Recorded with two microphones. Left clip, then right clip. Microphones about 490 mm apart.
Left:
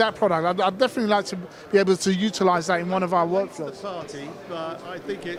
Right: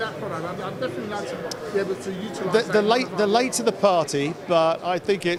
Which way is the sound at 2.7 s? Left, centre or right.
Left.